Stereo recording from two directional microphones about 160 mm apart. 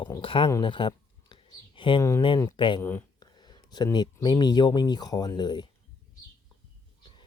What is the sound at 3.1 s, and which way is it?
Speech, 25° left (ahead or behind).